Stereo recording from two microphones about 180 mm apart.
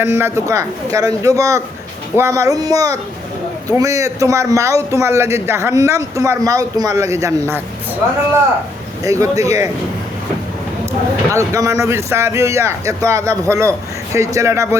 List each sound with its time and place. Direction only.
0.0 s a man's voice: 15° right (ahead or behind)
9.0 s a man's voice: 15° right (ahead or behind)
11.3 s a man's voice: 15° right (ahead or behind)